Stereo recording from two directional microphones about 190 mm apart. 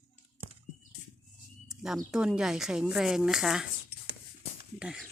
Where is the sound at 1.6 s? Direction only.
Centre (ahead or behind).